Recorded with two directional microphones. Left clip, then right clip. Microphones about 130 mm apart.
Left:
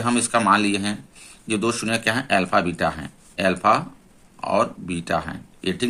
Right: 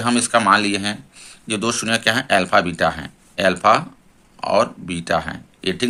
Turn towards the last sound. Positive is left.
turn(degrees=-20)  # may be behind; listen again after turning